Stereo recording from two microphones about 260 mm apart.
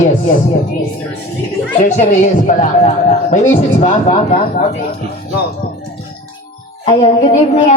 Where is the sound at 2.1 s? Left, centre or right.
Left.